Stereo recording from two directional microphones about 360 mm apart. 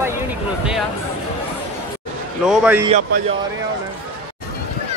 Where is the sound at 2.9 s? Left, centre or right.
Centre.